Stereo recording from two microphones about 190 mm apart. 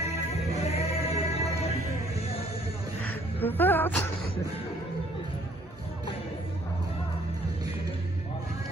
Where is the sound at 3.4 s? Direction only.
10° left (ahead or behind).